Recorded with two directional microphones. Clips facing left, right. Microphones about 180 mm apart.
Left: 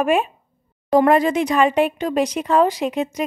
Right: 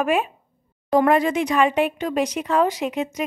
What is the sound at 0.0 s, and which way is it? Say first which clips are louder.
Speech: left 3 dB; 30° left (ahead or behind).